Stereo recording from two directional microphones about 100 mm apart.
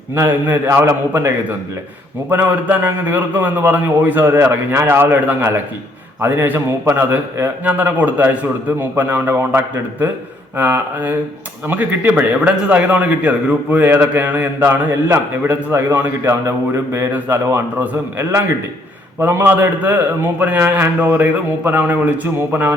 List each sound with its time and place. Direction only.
0.1 s a man's voice: 20° right (ahead or behind)